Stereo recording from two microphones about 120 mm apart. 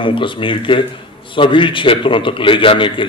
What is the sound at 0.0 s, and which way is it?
A man's voice, 45° left (ahead or behind).